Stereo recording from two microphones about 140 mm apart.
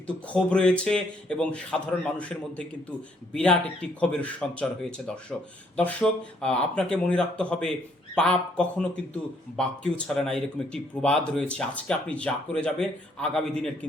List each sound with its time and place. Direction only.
0.3 s speech: 5° left (ahead or behind)